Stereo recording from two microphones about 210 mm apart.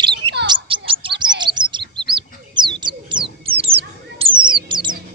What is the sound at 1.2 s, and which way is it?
Chirp, 20° right (ahead or behind).